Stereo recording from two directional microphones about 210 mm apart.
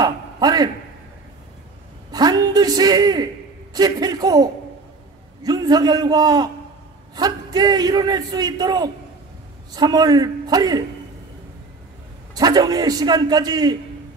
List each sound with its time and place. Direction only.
0.0 s a sound: 20° right (ahead or behind)
2.0 s a man's voice: 20° right (ahead or behind)
12.4 s a man's voice: 20° right (ahead or behind)